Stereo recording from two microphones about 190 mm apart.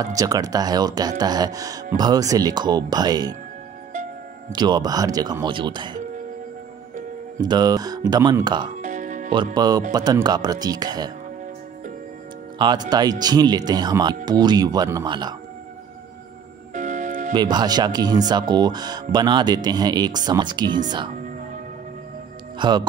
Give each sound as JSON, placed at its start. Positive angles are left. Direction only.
{"t": 0.0, "sound": "speech", "side_deg": -20}
{"t": 4.5, "sound": "speech", "side_deg": -20}
{"t": 7.3, "sound": "speech", "side_deg": -20}
{"t": 8.7, "sound": "music", "side_deg": -40}
{"t": 9.3, "sound": "speech", "side_deg": -25}
{"t": 12.5, "sound": "speech", "side_deg": -25}
{"t": 16.7, "sound": "music", "side_deg": -40}
{"t": 17.3, "sound": "speech", "side_deg": -20}
{"t": 22.6, "sound": "speech", "side_deg": -20}